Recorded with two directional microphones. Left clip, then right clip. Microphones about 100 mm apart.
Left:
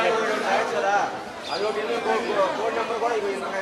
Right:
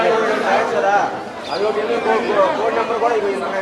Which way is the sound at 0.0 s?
10° right (ahead or behind).